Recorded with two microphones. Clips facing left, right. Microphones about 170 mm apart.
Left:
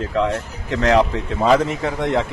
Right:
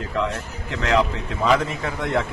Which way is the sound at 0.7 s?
40° left (ahead or behind).